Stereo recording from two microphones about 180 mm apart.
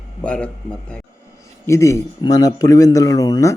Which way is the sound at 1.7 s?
15° left (ahead or behind).